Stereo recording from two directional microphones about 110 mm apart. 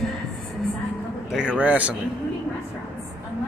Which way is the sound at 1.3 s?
10° right (ahead or behind).